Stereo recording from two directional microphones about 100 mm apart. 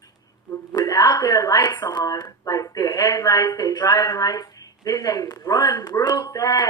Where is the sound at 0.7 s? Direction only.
40° left (ahead or behind).